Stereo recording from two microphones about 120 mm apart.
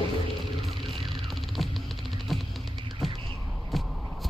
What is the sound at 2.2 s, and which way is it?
Music, centre (ahead or behind).